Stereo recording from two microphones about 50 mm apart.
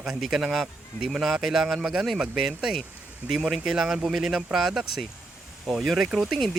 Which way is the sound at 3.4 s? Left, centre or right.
Centre.